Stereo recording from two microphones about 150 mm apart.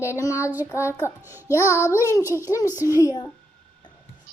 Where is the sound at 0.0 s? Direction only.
20° left (ahead or behind).